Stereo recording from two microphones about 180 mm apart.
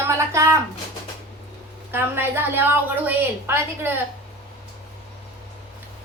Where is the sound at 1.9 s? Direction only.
10° right (ahead or behind).